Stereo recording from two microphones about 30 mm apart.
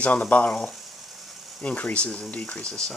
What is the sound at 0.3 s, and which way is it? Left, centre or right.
Speech, left.